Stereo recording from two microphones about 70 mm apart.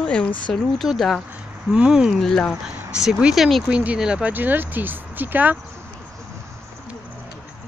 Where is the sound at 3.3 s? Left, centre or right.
Centre.